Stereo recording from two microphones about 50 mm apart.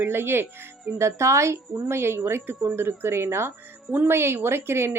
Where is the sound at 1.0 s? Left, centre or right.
Right.